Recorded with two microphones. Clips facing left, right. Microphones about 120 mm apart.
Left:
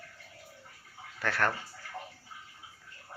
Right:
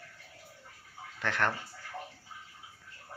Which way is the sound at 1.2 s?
20° right (ahead or behind).